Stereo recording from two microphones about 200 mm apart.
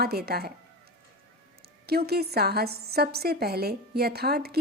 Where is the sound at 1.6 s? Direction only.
50° right (ahead or behind).